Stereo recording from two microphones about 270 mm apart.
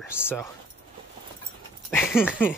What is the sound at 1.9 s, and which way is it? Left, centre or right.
Speech, centre.